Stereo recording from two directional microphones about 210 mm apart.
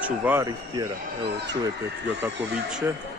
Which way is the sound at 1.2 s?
55° right (ahead or behind).